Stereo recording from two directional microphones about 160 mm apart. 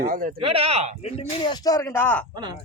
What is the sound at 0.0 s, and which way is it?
Speech, 60° right (ahead or behind).